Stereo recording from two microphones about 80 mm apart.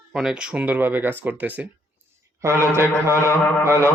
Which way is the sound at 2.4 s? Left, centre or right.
Right.